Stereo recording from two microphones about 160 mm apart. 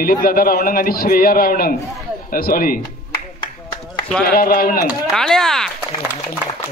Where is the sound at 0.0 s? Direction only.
65° left (ahead or behind).